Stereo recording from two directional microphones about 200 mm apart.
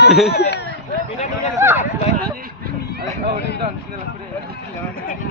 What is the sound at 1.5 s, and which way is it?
Speech, 10° right (ahead or behind).